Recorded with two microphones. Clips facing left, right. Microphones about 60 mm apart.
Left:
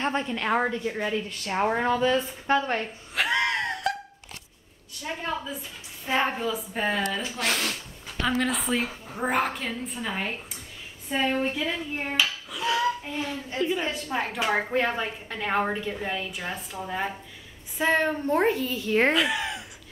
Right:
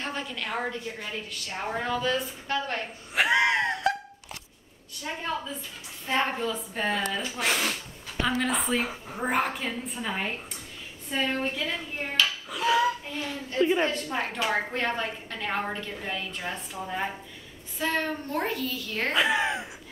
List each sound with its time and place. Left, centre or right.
0.0 s a woman's voice: left
1.7 s a woman's voice: left
3.2 s a sound: centre
5.0 s a woman's voice: centre
7.3 s speech: centre
11.1 s a woman's voice: centre
12.4 s a sound: centre
13.1 s a woman's voice: centre
13.6 s speech: right
13.8 s a woman's voice: centre
17.7 s a woman's voice: left
19.1 s speech: right